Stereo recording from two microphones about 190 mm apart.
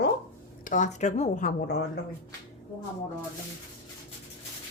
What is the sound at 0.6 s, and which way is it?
Speech, 40° left (ahead or behind).